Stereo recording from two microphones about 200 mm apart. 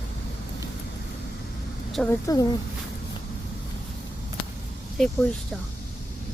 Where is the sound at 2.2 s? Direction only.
15° left (ahead or behind).